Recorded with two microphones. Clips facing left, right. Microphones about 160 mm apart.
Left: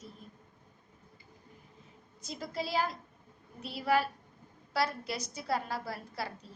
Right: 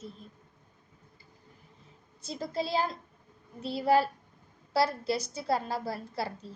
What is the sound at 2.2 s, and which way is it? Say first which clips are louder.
A woman's voice: right 4 dB; 30° right (ahead or behind).